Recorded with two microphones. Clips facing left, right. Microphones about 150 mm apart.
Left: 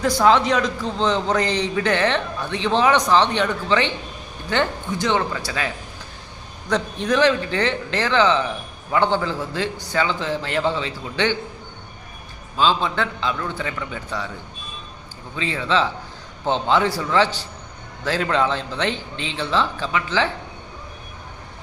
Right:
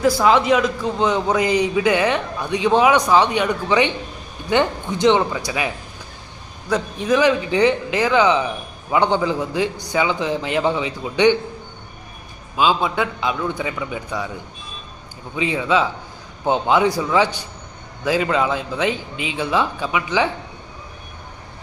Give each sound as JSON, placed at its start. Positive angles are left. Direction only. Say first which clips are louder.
{"t": 0.0, "sound": "a man's voice", "louder": "right 1 dB", "side_deg": -5}
{"t": 12.5, "sound": "a man's voice", "louder": "right 2 dB", "side_deg": -10}
{"t": 15.4, "sound": "a man's voice", "louder": "right 3 dB", "side_deg": -15}